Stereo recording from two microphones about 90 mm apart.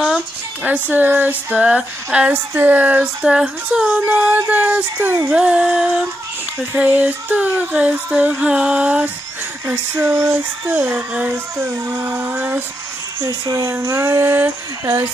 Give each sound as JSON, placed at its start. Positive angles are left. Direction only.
{"t": 0.7, "sound": "a sound", "side_deg": -20}
{"t": 4.5, "sound": "child singing", "side_deg": -20}
{"t": 5.3, "sound": "a sound", "side_deg": -15}
{"t": 9.7, "sound": "child singing", "side_deg": -25}
{"t": 13.2, "sound": "speech", "side_deg": -35}
{"t": 13.8, "sound": "child singing", "side_deg": -30}